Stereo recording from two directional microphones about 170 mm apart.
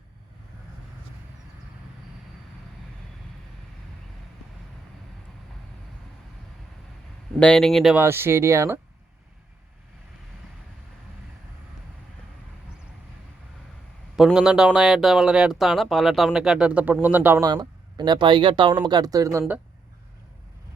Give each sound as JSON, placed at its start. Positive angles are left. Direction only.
{"t": 7.3, "sound": "speech", "side_deg": 5}
{"t": 7.9, "sound": "speech", "side_deg": -15}
{"t": 14.2, "sound": "speech", "side_deg": -5}
{"t": 17.5, "sound": "speech", "side_deg": -25}